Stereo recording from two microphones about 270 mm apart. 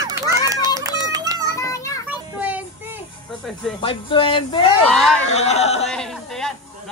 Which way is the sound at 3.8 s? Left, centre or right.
Centre.